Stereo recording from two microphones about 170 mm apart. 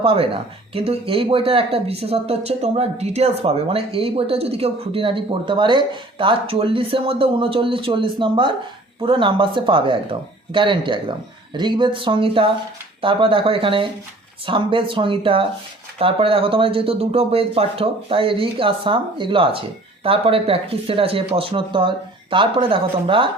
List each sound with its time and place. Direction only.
0.0 s speech: 35° right (ahead or behind)